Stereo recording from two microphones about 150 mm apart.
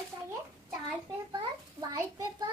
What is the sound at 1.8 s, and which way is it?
Speech, 25° right (ahead or behind).